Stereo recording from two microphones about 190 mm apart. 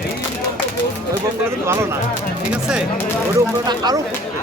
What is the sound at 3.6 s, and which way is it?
Speech, 20° right (ahead or behind).